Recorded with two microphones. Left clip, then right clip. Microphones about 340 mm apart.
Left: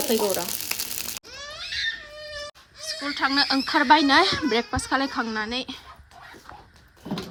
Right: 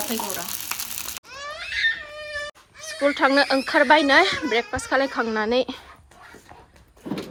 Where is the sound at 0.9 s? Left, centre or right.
Centre.